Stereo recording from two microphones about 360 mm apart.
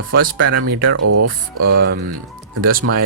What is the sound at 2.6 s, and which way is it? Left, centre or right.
Speech, right.